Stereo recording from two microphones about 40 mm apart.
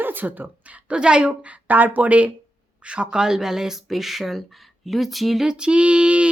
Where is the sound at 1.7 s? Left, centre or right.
Right; by 5.4 s centre.